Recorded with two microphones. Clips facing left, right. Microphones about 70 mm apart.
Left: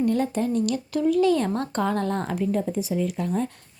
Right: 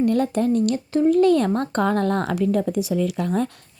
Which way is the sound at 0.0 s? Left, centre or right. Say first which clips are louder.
Right 3 dB; right.